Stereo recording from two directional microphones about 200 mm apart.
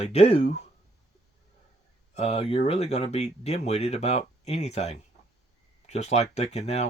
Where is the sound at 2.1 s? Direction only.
30° left (ahead or behind).